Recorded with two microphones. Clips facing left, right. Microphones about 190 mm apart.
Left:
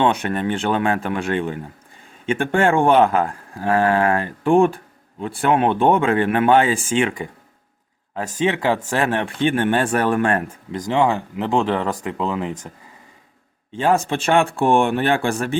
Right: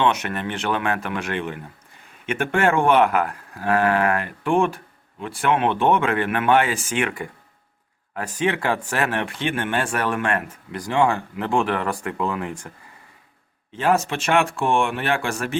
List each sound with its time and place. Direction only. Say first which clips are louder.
0.0 s speech: left 3 dB; 30° left (ahead or behind)
8.1 s speech: left 2 dB; 25° left (ahead or behind)
9.2 s speech: left 6 dB; 35° left (ahead or behind)
10.8 s speech: left 2 dB; 20° left (ahead or behind)
14.1 s speech: left 3 dB; 30° left (ahead or behind)